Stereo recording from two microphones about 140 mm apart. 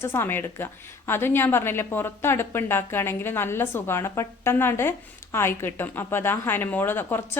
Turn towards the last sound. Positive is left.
turn(degrees=15)  # may be behind; listen again after turning